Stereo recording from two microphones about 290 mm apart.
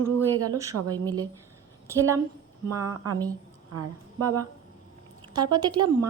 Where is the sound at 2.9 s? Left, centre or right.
Right.